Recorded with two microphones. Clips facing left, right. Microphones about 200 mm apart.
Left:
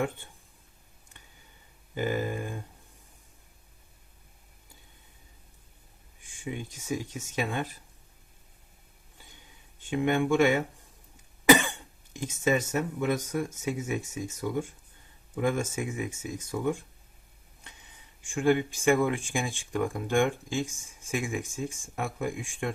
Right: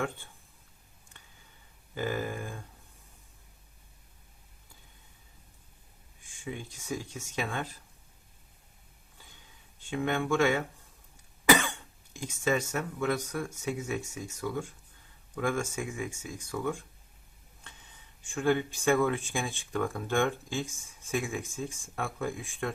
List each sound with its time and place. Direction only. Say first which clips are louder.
2.0 s speech: left 3 dB; 15° left (ahead or behind)
6.3 s speech: left 3 dB; 15° left (ahead or behind)
9.9 s speech: left 4 dB; 15° left (ahead or behind)
11.4 s cough: left 4 dB; 20° left (ahead or behind)
12.1 s speech: left 3 dB; 20° left (ahead or behind)
18.2 s speech: left 3 dB; 15° left (ahead or behind)